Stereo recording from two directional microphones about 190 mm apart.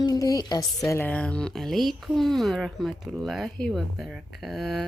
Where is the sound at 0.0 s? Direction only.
20° left (ahead or behind).